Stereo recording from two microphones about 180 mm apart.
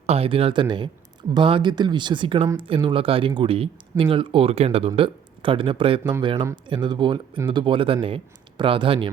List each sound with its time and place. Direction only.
0.0 s speech: 35° right (ahead or behind)